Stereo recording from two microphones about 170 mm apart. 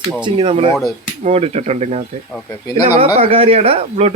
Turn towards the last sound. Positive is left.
turn(degrees=-35)  # may be behind; listen again after turning